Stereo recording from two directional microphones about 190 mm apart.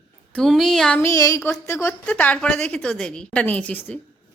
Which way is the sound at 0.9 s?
15° left (ahead or behind).